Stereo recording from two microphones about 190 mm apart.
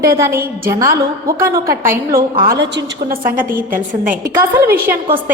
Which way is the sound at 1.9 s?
50° right (ahead or behind).